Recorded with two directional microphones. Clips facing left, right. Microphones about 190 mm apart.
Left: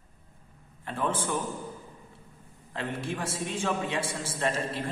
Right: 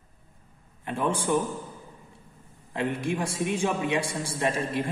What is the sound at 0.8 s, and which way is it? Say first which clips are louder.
Speech: right 3 dB; 15° right (ahead or behind).